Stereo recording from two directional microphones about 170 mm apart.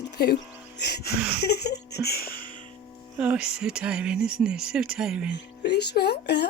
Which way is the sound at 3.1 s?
5° right (ahead or behind).